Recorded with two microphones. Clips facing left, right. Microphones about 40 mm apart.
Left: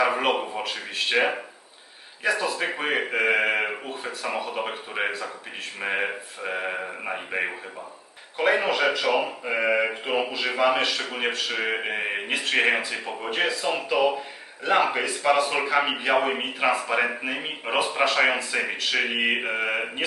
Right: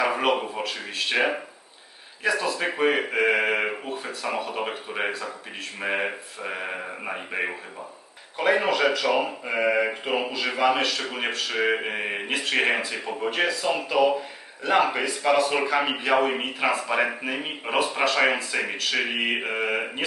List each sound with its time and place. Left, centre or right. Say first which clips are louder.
0.2 s a man's voice: right 1 dB; centre
8.9 s speech: even; centre
9.1 s a man's voice: even; centre